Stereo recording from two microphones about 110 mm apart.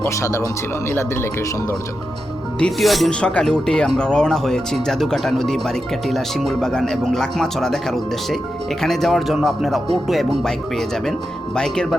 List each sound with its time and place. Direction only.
0.1 s speech: 25° left (ahead or behind)
2.6 s speech: centre (ahead or behind)